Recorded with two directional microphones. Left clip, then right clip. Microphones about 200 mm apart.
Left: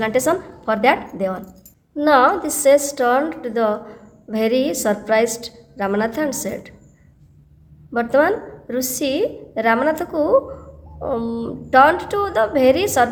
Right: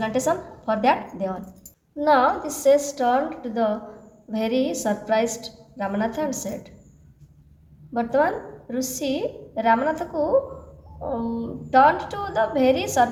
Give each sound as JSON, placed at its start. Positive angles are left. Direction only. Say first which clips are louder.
{"t": 0.0, "sound": "a woman's voice", "louder": "left 5 dB", "side_deg": 35}
{"t": 7.9, "sound": "a woman's voice", "louder": "left 5 dB", "side_deg": 35}